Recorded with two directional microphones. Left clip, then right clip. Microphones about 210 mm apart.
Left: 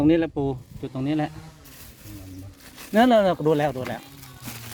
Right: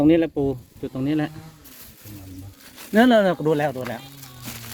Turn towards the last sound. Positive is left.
turn(degrees=20)  # may be behind; listen again after turning